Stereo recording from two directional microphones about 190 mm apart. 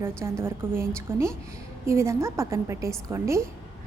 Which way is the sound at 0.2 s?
15° right (ahead or behind).